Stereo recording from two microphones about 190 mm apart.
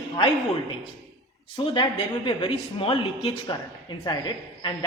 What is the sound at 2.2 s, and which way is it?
A man's voice, 30° left (ahead or behind).